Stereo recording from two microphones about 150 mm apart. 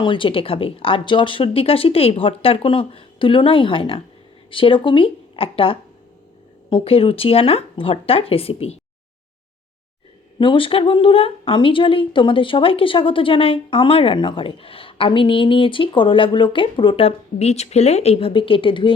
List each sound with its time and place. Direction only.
0.0 s a woman's voice: 35° left (ahead or behind)
10.4 s a woman's voice: 35° left (ahead or behind)